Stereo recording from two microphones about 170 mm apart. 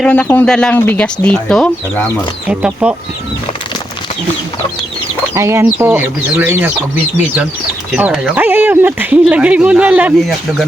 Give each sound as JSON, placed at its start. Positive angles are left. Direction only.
{"t": 0.0, "sound": "speech", "side_deg": 5}
{"t": 2.5, "sound": "speech", "side_deg": -5}
{"t": 5.3, "sound": "speech", "side_deg": -15}
{"t": 7.9, "sound": "speech", "side_deg": -5}